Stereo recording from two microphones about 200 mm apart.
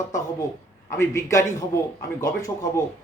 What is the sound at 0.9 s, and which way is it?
A man's voice, 15° left (ahead or behind).